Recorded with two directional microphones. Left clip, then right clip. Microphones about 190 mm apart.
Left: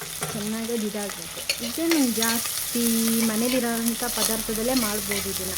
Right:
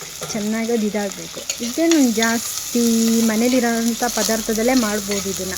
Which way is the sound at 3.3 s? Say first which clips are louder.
Right 7 dB; 30° right (ahead or behind).